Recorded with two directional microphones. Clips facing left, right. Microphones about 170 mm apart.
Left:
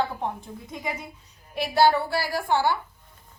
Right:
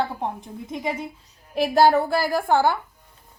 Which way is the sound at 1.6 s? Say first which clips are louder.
Right 4 dB; 45° right (ahead or behind).